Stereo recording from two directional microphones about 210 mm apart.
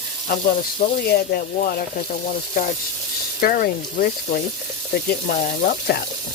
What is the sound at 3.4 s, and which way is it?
Speech, 45° left (ahead or behind).